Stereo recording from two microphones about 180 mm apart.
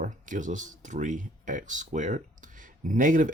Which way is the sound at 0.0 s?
45° right (ahead or behind).